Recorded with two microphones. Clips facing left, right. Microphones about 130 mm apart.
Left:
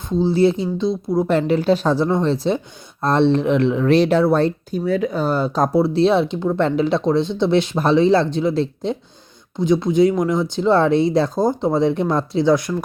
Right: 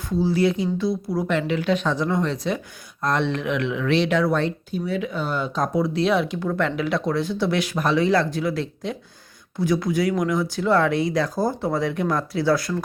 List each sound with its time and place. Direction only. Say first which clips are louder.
0.1 s speech: left 4 dB; 25° left (ahead or behind)
1.3 s speech: left 5 dB; 40° left (ahead or behind); by 12.8 s 20° left (ahead or behind)